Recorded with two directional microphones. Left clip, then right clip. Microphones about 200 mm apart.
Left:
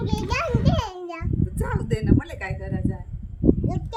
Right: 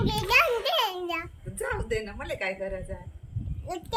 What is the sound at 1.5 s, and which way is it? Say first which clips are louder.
A woman's voice: right 2 dB; 45° left (ahead or behind).